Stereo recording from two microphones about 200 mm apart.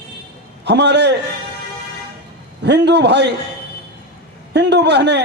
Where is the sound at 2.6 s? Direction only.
60° right (ahead or behind).